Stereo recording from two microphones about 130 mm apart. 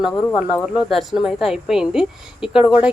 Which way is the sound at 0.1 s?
15° left (ahead or behind).